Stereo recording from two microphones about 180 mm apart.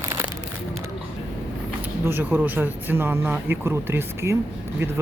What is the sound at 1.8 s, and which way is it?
Speech, 10° right (ahead or behind).